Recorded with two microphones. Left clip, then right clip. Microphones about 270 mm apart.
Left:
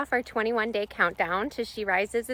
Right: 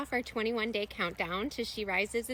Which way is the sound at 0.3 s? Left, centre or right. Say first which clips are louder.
Left 5 dB; centre.